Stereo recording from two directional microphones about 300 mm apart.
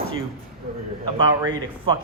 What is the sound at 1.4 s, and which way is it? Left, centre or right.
Speech, centre.